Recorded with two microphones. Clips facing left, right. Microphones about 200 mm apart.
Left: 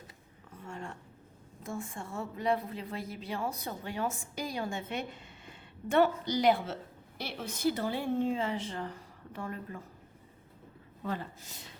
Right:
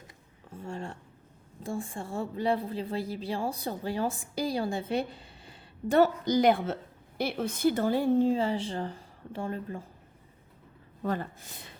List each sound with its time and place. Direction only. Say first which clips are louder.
0.5 s a sound: right 5 dB; 30° right (ahead or behind)
1.6 s a woman's voice: right 4 dB; 30° right (ahead or behind)
11.0 s speech: right 5 dB; 50° right (ahead or behind)